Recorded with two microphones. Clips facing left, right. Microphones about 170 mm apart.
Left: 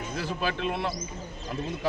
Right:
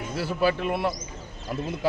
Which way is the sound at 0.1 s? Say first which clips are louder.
Right 7 dB; 5° right (ahead or behind).